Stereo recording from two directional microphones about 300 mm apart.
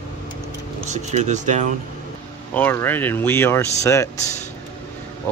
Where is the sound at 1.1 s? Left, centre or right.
Right.